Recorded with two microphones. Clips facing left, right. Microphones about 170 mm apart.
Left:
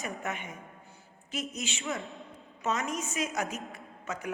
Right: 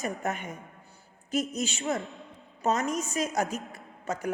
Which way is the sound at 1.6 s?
40° right (ahead or behind).